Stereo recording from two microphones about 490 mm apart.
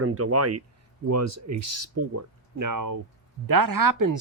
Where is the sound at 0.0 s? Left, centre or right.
Right.